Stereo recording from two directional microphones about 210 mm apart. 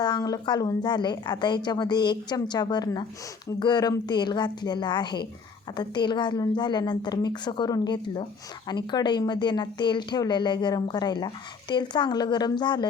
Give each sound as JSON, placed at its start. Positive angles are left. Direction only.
{"t": 0.0, "sound": "a woman's voice", "side_deg": 20}